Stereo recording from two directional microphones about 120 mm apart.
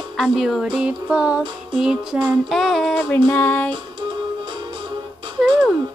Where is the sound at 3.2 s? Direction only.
15° left (ahead or behind).